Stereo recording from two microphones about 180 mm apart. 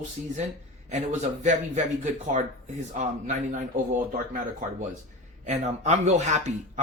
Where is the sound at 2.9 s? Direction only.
45° right (ahead or behind).